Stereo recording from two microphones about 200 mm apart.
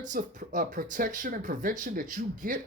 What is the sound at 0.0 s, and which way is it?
Speech, 40° right (ahead or behind).